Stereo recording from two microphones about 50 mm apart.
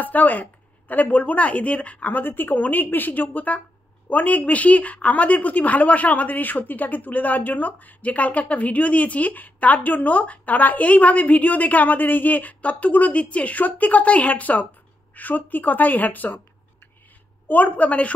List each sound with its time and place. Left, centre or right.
0.0 s a woman's voice: left
17.5 s a woman's voice: left